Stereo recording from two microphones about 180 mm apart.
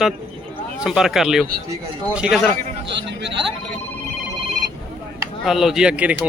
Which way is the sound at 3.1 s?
75° right (ahead or behind).